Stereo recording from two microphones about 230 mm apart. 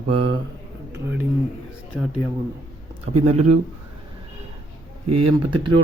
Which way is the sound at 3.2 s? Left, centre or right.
Right.